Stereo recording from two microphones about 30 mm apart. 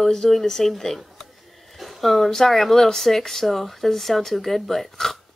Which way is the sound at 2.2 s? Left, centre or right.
Centre.